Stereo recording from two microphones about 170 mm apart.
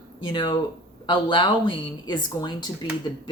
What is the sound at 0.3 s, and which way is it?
Speech, 30° left (ahead or behind).